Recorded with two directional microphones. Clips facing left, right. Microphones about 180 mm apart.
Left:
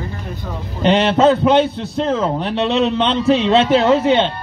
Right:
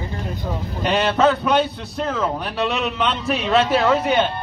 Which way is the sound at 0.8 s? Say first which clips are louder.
Left 5 dB; 25° left (ahead or behind).